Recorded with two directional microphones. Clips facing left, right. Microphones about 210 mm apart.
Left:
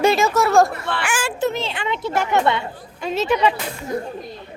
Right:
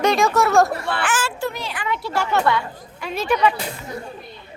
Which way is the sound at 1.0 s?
15° left (ahead or behind).